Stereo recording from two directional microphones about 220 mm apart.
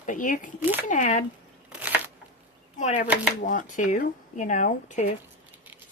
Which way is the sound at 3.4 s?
35° left (ahead or behind).